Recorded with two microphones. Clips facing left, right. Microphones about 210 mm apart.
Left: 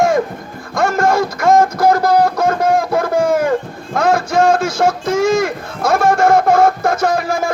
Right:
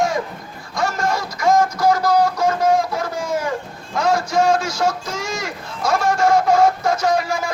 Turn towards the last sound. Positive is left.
turn(degrees=55)  # may be behind; listen again after turning